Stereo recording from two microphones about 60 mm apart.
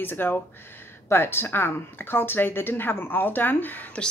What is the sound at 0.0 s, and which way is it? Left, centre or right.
Speech, left.